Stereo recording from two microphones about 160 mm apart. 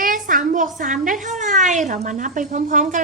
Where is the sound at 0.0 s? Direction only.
60° right (ahead or behind).